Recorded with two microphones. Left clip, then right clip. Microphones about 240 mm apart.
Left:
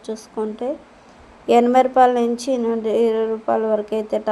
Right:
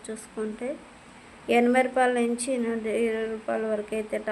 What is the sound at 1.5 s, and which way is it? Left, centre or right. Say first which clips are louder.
A woman's voice: left 8 dB; centre.